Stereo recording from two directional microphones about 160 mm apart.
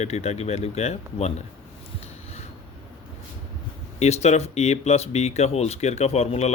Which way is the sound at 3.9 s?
45° left (ahead or behind).